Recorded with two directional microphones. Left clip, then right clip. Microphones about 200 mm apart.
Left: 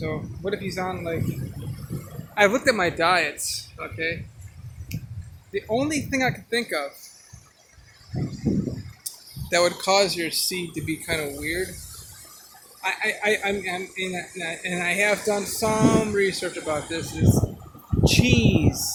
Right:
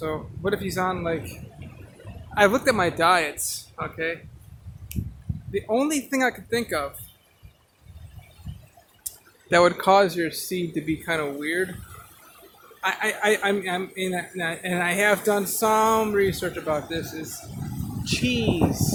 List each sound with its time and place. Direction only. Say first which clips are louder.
0.0 s speech: right 2 dB; 15° right (ahead or behind)
2.3 s speech: even; 10° right (ahead or behind)
4.9 s a sound: right 1 dB; 15° right (ahead or behind)
5.5 s speech: right 1 dB; 15° right (ahead or behind)
9.5 s speech: right 3 dB; 30° right (ahead or behind)
12.8 s speech: right 1 dB; 20° right (ahead or behind)
18.0 s speech: left 4 dB; 10° left (ahead or behind)